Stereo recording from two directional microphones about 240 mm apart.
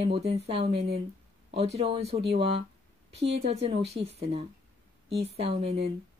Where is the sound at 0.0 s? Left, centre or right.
Right.